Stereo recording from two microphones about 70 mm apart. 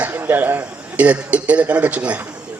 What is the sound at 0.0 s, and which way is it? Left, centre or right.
A man's voice, right.